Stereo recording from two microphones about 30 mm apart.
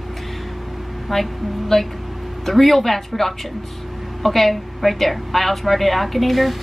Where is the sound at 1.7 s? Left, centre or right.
Centre.